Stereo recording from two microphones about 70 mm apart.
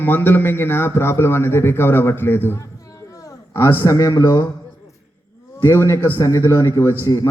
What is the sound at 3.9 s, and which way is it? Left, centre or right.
Speech, left.